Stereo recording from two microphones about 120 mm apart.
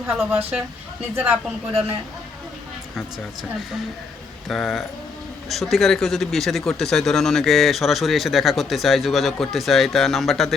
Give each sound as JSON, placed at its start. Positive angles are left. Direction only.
{"t": 0.3, "sound": "speech", "side_deg": -15}
{"t": 4.4, "sound": "speech", "side_deg": 0}